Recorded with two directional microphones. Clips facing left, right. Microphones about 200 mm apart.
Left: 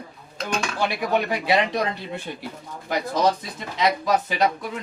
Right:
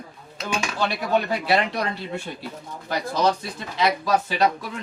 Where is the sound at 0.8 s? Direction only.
15° left (ahead or behind).